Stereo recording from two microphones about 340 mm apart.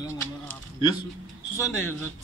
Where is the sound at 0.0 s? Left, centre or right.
Centre.